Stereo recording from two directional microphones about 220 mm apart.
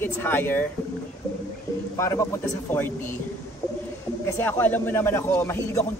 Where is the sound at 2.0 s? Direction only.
15° left (ahead or behind).